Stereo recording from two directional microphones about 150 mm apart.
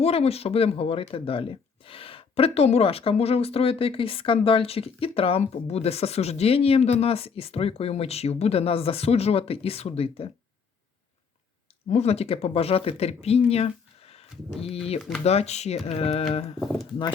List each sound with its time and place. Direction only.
0.0 s speech: 40° left (ahead or behind)
11.9 s speech: 45° left (ahead or behind)
16.6 s speech: centre (ahead or behind)